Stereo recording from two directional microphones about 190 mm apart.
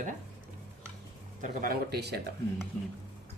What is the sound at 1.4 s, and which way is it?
Speech, 50° right (ahead or behind).